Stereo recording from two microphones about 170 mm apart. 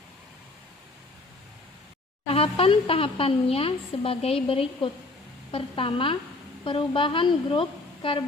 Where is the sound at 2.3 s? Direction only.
35° left (ahead or behind).